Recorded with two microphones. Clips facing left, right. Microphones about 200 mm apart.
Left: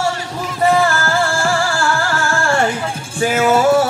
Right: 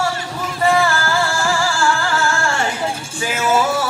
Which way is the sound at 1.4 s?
50° left (ahead or behind).